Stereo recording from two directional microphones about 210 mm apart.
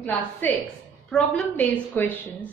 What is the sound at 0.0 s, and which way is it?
A woman's voice, 10° left (ahead or behind).